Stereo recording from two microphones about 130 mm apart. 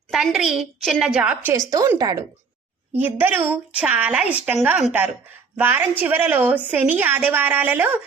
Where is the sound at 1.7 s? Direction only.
25° right (ahead or behind).